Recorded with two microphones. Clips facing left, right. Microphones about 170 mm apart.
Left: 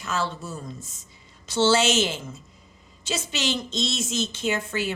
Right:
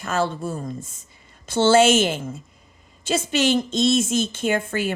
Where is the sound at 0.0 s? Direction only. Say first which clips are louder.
Right 5 dB; 50° right (ahead or behind).